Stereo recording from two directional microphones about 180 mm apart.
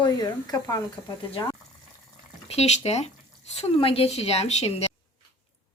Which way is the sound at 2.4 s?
35° left (ahead or behind).